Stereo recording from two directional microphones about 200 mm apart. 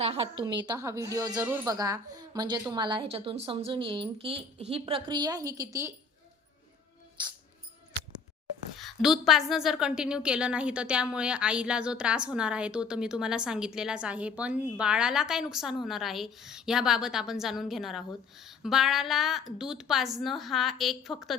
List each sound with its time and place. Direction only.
0.0 s a woman's voice: 30° right (ahead or behind); by 1.7 s 10° right (ahead or behind)
1.7 s a woman's voice: 20° right (ahead or behind)
7.2 s a woman's voice: 20° right (ahead or behind)
8.8 s a woman's voice: centre (ahead or behind)